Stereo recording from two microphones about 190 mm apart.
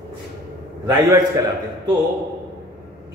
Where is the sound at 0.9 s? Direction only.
15° right (ahead or behind).